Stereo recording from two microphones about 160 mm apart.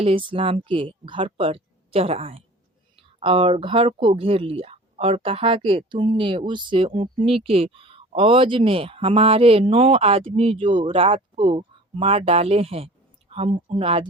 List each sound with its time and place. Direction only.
0.0 s speech: 35° right (ahead or behind)